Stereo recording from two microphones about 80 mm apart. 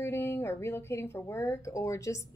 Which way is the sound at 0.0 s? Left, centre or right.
Left.